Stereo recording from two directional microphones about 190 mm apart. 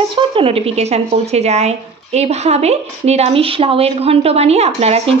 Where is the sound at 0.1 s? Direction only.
30° right (ahead or behind).